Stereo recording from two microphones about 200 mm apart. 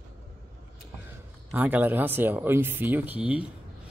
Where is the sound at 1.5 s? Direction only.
10° right (ahead or behind).